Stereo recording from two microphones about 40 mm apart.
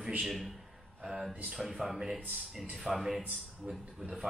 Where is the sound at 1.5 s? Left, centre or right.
Centre.